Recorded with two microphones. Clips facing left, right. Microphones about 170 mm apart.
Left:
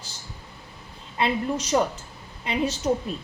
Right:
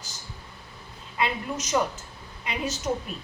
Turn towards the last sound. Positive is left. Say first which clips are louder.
# left 5 dB
turn(degrees=30)  # may be behind; listen again after turning